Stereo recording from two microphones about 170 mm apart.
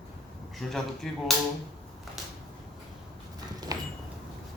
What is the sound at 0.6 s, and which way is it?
Speech, centre (ahead or behind).